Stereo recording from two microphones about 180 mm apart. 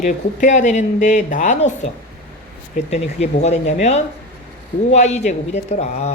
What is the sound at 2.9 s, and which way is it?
Speech, 40° left (ahead or behind).